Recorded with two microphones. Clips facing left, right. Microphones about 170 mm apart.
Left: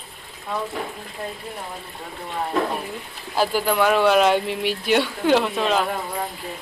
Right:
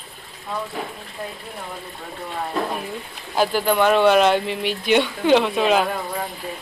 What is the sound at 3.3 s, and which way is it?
Speech, 5° left (ahead or behind).